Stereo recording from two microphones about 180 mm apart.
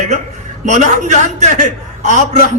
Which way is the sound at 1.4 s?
40° right (ahead or behind).